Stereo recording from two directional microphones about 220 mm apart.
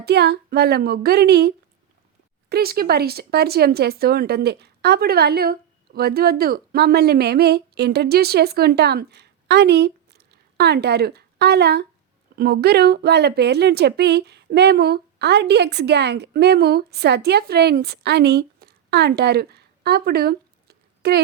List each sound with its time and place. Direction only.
0.0 s a woman's voice: 50° right (ahead or behind)